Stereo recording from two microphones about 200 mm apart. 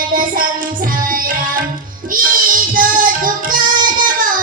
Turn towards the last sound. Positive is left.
turn(degrees=-45)  # may be behind; listen again after turning